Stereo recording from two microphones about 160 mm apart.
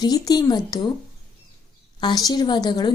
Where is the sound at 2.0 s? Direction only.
25° left (ahead or behind).